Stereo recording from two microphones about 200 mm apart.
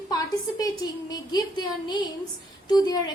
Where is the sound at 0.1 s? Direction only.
20° left (ahead or behind).